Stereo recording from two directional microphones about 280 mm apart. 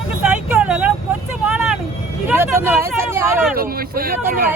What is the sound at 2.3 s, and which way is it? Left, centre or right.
Speech, centre.